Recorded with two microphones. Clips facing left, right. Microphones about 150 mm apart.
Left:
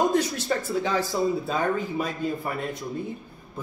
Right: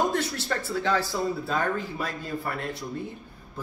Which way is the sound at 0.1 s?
15° left (ahead or behind).